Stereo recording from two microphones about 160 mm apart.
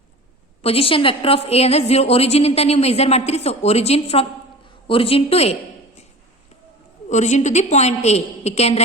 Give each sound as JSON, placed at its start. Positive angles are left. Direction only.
{"t": 0.6, "sound": "a woman's voice", "side_deg": 35}
{"t": 7.1, "sound": "a woman's voice", "side_deg": 45}